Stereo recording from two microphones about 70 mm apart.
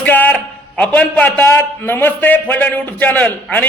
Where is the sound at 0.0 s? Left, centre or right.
Left.